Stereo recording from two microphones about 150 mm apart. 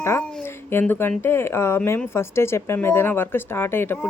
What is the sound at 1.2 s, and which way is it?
Speech, 15° left (ahead or behind).